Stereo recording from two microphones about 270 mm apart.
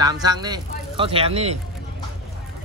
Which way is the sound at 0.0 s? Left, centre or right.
Centre.